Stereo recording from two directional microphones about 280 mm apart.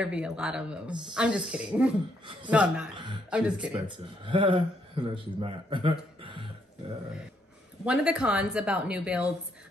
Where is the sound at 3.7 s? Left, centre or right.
Centre.